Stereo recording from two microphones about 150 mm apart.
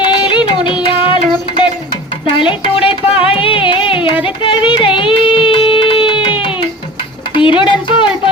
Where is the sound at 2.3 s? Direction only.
35° left (ahead or behind).